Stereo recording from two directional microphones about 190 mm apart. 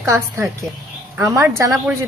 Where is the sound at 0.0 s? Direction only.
15° right (ahead or behind).